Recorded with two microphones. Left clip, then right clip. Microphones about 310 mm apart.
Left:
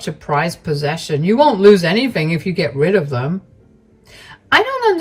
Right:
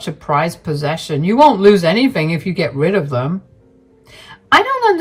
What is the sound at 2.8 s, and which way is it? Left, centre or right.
Speech, right.